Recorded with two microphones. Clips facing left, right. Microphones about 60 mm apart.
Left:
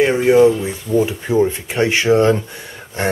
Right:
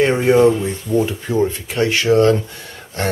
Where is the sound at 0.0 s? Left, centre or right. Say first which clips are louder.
Left 1 dB; centre.